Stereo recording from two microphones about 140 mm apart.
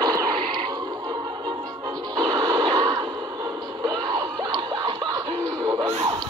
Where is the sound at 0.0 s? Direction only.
25° right (ahead or behind).